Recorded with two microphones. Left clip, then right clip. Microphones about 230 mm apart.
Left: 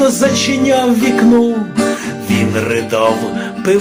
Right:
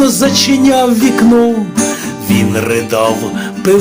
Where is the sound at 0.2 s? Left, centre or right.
Right.